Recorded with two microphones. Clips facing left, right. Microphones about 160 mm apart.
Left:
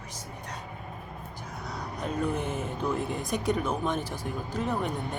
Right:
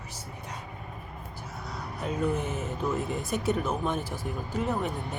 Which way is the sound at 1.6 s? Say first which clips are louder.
Even; 5° right (ahead or behind).